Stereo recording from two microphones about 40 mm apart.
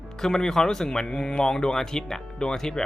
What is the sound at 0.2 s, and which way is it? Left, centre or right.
Speech, centre.